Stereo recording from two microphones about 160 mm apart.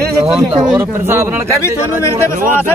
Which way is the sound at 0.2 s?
15° right (ahead or behind).